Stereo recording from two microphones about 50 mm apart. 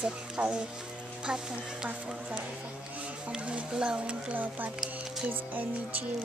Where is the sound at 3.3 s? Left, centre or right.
Right.